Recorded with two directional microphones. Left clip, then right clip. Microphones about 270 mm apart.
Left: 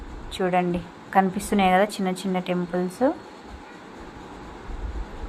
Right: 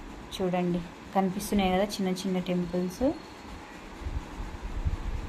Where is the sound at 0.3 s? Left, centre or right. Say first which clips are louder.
Left 7 dB; centre.